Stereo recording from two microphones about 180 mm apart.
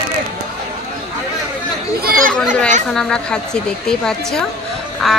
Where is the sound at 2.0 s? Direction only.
50° right (ahead or behind).